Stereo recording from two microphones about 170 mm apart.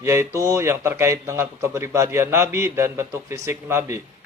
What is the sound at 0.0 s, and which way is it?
A man's voice, 15° right (ahead or behind).